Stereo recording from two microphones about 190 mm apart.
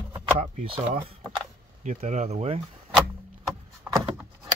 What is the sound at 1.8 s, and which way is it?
Speech, 40° right (ahead or behind).